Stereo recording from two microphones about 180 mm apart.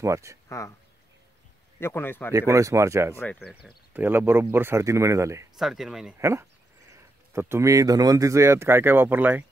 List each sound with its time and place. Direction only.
0.0 s speech: 15° right (ahead or behind)
0.5 s speech: 15° left (ahead or behind)
1.8 s speech: 10° left (ahead or behind)
2.3 s speech: 15° right (ahead or behind)
3.2 s speech: 5° left (ahead or behind)
3.9 s speech: 10° right (ahead or behind)
5.6 s speech: centre (ahead or behind)
6.1 s speech: 15° right (ahead or behind)